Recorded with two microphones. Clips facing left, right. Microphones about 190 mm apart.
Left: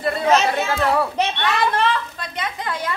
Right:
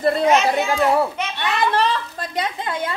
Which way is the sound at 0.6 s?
15° right (ahead or behind).